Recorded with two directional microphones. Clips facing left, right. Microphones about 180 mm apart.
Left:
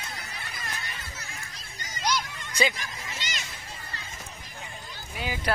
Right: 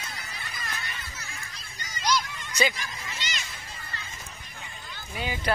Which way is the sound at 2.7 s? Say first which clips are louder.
Even; 45° left (ahead or behind).